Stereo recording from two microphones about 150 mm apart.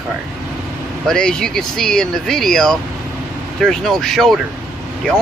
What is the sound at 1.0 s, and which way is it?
Speech, 5° left (ahead or behind).